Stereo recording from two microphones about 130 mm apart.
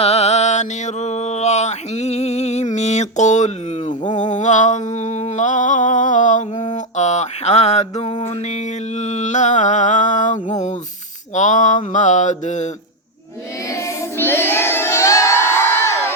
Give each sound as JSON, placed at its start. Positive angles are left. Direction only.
{"t": 0.0, "sound": "mantra", "side_deg": 55}
{"t": 4.2, "sound": "a sound", "side_deg": 65}
{"t": 6.7, "sound": "mantra", "side_deg": 60}
{"t": 13.7, "sound": "child singing", "side_deg": 25}